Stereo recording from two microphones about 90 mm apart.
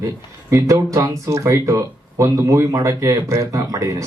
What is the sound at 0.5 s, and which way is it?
Speech, 35° right (ahead or behind).